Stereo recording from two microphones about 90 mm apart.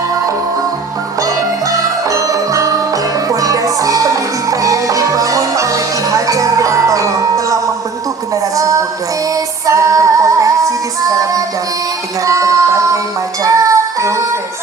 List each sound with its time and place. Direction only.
1.2 s music: 40° right (ahead or behind)